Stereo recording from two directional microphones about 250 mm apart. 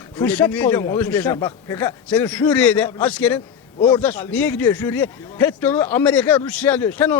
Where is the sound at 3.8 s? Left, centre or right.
Centre.